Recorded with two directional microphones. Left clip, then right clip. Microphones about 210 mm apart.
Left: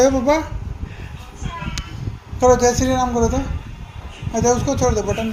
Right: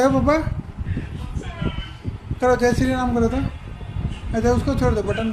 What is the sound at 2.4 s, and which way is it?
A man's voice, 30° right (ahead or behind).